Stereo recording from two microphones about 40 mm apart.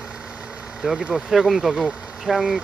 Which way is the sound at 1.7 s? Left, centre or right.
Right.